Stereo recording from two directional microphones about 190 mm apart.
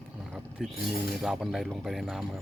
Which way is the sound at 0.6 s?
Centre (ahead or behind).